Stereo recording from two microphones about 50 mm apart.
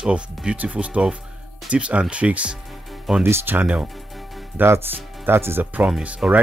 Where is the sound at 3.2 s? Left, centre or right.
Right.